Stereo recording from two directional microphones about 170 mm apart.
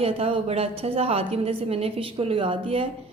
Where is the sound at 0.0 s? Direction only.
35° right (ahead or behind).